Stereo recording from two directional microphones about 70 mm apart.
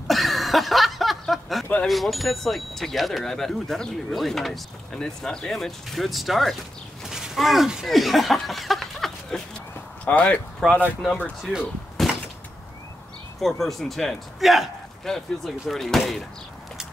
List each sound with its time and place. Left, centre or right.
0.1 s a sound: centre
1.9 s speech: centre
10.0 s speech: left
10.6 s speech: centre
12.0 s door: centre
13.4 s speech: centre